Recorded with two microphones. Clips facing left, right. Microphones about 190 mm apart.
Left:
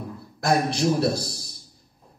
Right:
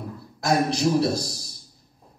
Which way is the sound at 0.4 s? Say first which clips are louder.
Even; 55° left (ahead or behind).